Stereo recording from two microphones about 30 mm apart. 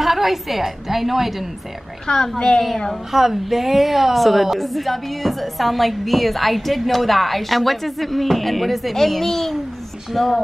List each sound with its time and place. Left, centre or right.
0.0 s a woman's voice: centre
2.0 s a woman's voice: left
3.1 s a woman's voice: centre
8.9 s a child's voice: centre